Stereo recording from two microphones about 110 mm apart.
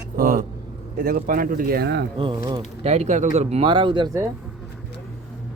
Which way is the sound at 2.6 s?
70° right (ahead or behind).